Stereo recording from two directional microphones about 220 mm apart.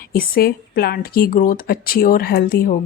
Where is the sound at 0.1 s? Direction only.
45° left (ahead or behind).